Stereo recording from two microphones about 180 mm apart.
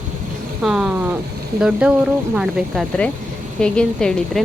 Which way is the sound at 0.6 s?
5° right (ahead or behind).